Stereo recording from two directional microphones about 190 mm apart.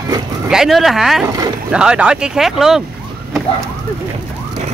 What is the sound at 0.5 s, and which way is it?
Speech, centre (ahead or behind).